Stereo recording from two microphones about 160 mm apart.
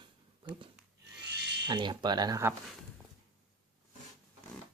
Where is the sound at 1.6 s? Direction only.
30° right (ahead or behind).